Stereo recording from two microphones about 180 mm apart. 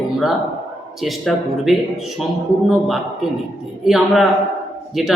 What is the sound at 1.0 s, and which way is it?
A man's voice, centre (ahead or behind).